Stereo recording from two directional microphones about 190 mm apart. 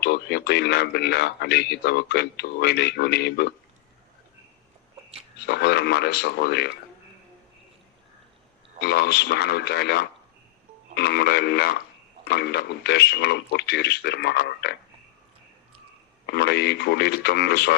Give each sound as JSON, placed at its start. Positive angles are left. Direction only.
{"t": 0.0, "sound": "a man's voice", "side_deg": 60}
{"t": 5.5, "sound": "a man's voice", "side_deg": 60}
{"t": 8.8, "sound": "a man's voice", "side_deg": 60}
{"t": 16.2, "sound": "a man's voice", "side_deg": 60}